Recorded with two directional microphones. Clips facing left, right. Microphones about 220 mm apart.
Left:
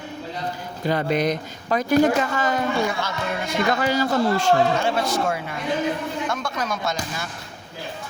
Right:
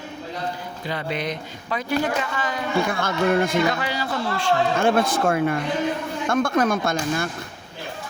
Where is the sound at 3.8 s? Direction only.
45° left (ahead or behind).